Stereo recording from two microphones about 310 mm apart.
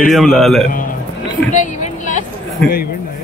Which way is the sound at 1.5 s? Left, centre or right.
Left.